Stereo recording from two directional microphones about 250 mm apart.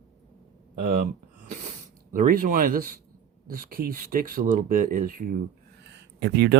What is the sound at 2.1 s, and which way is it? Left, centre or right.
Speech, right.